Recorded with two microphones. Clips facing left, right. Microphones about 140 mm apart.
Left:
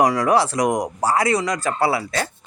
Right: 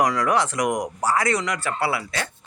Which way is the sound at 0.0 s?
30° left (ahead or behind).